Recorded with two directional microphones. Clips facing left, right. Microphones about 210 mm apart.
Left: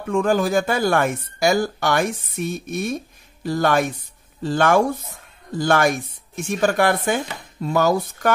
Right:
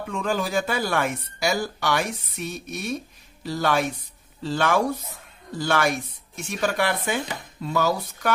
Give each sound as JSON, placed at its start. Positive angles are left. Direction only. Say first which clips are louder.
{"t": 0.1, "sound": "speech", "louder": "left 7 dB", "side_deg": 50}